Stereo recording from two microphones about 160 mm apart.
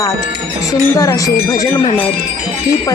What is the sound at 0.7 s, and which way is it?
Speech, 20° left (ahead or behind).